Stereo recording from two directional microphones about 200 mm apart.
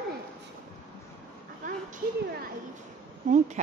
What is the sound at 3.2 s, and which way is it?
Speech, 40° right (ahead or behind).